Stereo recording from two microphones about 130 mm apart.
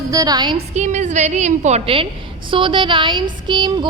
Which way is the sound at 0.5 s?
65° right (ahead or behind).